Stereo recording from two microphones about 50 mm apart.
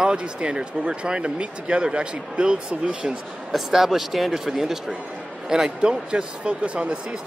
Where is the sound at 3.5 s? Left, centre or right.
Centre; by 7.1 s right.